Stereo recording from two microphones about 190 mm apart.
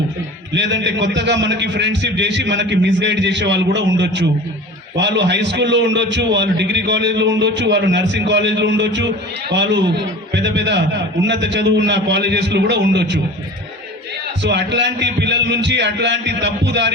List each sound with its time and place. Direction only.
0.5 s a man's voice: 70° right (ahead or behind)
14.4 s a man's voice: 65° right (ahead or behind)